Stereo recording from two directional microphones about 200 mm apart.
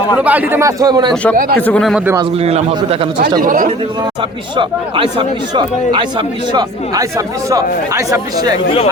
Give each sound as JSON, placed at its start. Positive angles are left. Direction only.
{"t": 0.2, "sound": "speech", "side_deg": -10}
{"t": 1.1, "sound": "speech", "side_deg": 5}
{"t": 2.4, "sound": "speech", "side_deg": -30}
{"t": 3.4, "sound": "a man's voice", "side_deg": -45}
{"t": 4.5, "sound": "speech", "side_deg": -25}